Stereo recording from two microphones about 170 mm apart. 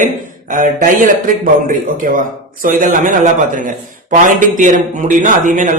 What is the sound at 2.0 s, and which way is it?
A man's voice, 50° right (ahead or behind).